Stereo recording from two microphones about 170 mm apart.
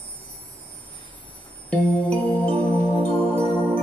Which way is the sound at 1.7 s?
5° left (ahead or behind).